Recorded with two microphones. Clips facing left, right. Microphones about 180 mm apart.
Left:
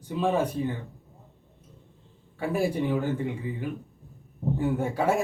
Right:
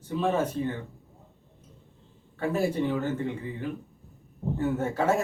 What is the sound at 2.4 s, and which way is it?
Speech, 10° left (ahead or behind).